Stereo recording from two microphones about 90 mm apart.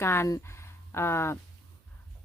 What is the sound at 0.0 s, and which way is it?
Speech, 30° left (ahead or behind).